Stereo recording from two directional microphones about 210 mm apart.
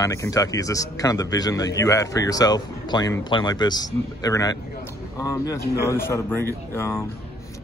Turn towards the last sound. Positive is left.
turn(degrees=10)  # may be behind; listen again after turning